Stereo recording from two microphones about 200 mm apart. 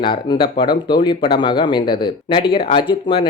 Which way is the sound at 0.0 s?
25° left (ahead or behind).